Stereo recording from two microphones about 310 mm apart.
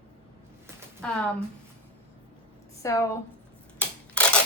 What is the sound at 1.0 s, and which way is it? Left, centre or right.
Speech, centre.